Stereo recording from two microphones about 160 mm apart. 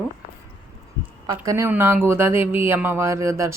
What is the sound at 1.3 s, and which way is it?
Speech, 20° right (ahead or behind).